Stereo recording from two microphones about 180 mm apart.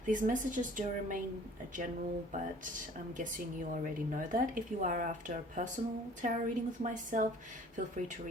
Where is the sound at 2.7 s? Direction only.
45° right (ahead or behind).